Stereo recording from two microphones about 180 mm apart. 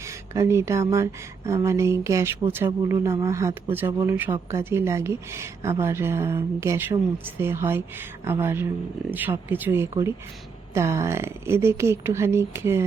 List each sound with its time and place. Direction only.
0.0 s speech: 15° right (ahead or behind)